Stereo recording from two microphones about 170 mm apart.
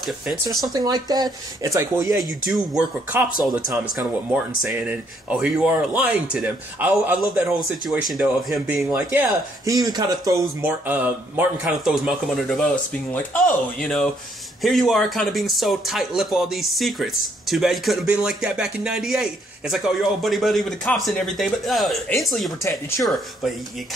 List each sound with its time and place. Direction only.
0.0 s speech: centre (ahead or behind)
0.7 s speech: 25° right (ahead or behind)
2.5 s speech: 5° right (ahead or behind)
9.7 s speech: 25° right (ahead or behind)
10.6 s speech: 10° right (ahead or behind)
22.6 s speech: 15° left (ahead or behind)
23.0 s speech: centre (ahead or behind)